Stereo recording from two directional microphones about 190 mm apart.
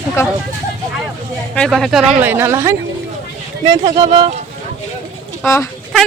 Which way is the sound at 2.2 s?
10° right (ahead or behind).